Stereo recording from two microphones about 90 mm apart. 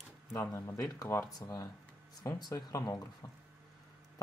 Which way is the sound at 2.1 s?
35° left (ahead or behind).